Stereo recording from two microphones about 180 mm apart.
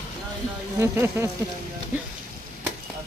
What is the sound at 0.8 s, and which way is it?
Speech, 15° right (ahead or behind).